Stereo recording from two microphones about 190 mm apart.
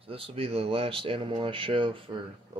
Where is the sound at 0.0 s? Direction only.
30° right (ahead or behind).